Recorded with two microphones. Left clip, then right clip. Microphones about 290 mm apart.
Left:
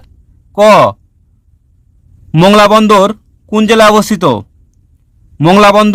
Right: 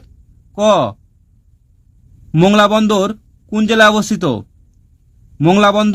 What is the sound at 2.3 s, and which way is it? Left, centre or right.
A man's voice, left.